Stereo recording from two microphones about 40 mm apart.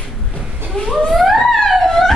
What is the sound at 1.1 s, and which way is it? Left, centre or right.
Music, centre.